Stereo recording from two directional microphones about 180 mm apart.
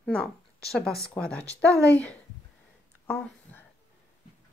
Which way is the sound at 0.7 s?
Centre (ahead or behind).